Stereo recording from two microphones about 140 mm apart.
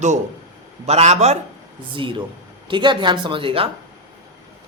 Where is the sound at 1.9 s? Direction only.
35° right (ahead or behind).